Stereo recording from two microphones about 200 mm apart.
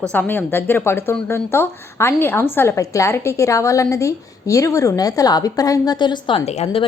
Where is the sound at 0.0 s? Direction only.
10° left (ahead or behind).